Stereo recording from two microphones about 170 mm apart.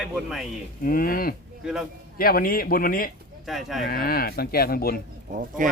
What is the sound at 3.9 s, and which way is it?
Speech, 60° left (ahead or behind).